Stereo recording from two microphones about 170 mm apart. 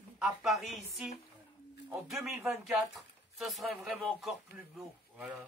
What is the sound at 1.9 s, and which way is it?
Speech, 10° right (ahead or behind).